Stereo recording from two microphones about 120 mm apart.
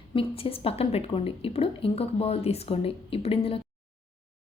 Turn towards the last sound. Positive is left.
turn(degrees=55)  # may be behind; listen again after turning